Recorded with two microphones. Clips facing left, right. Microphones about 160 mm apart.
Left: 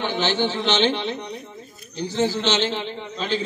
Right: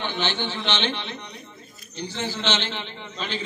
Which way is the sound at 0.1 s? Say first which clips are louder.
Left 5 dB; 40° left (ahead or behind).